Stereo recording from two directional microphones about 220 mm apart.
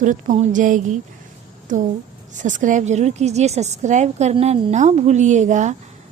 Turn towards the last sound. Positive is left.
turn(degrees=-35)  # may be behind; listen again after turning